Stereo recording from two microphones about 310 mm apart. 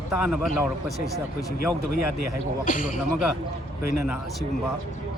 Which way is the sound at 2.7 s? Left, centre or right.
Left.